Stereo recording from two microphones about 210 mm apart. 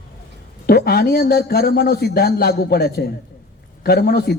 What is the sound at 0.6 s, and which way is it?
Speech, 45° left (ahead or behind).